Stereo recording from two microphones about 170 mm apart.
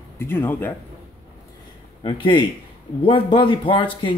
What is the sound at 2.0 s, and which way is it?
Speech, 30° left (ahead or behind).